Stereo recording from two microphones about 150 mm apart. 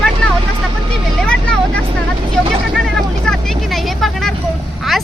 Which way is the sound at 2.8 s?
Centre (ahead or behind).